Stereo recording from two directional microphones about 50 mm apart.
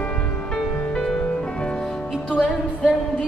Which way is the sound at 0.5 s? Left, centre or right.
Centre.